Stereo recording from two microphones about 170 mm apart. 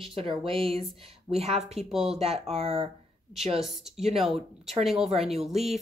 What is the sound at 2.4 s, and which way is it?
Speech, 35° right (ahead or behind).